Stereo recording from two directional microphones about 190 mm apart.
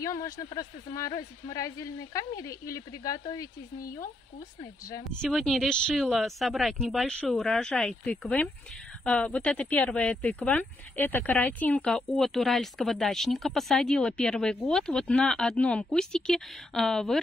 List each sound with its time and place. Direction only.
0.0 s speech: 15° left (ahead or behind)
5.2 s speech: centre (ahead or behind)